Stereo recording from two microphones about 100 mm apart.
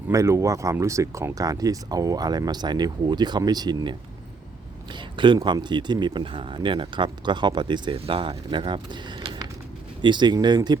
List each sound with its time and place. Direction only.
0.1 s speech: 30° right (ahead or behind); by 7.9 s 50° right (ahead or behind)
7.9 s speech: 70° right (ahead or behind); by 10.8 s 45° right (ahead or behind)